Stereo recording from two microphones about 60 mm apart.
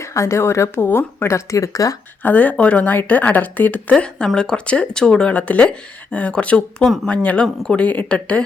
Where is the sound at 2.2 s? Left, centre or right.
Left.